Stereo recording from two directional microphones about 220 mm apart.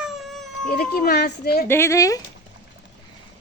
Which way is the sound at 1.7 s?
10° left (ahead or behind).